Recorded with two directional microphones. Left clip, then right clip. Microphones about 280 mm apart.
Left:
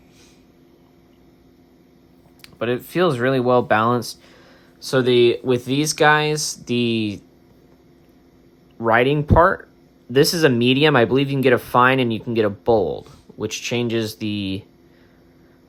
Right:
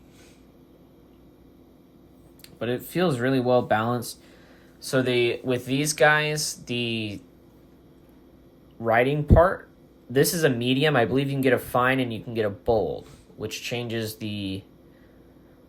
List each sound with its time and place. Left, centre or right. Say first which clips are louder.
2.4 s speech: left 6 dB; centre
8.8 s speech: left 5 dB; centre